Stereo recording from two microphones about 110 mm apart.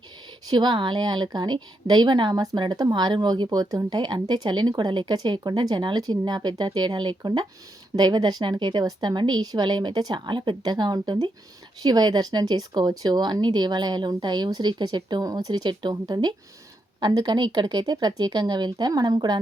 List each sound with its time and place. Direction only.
0.5 s a woman's voice: 45° right (ahead or behind)